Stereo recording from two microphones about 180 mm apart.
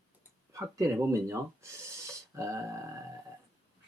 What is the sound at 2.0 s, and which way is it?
Grunt, 15° right (ahead or behind).